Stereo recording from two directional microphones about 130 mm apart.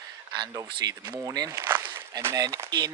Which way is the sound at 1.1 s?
20° right (ahead or behind).